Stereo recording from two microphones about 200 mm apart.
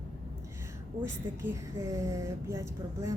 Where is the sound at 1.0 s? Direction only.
10° right (ahead or behind).